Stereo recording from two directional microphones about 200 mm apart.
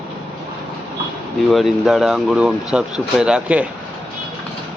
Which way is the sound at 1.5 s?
Centre (ahead or behind).